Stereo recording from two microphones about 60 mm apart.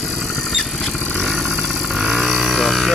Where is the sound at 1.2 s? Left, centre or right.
Centre.